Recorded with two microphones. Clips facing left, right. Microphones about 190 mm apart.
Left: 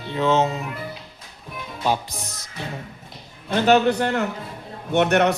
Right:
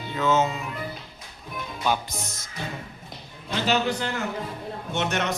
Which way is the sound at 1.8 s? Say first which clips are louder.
Left 3 dB; 30° left (ahead or behind).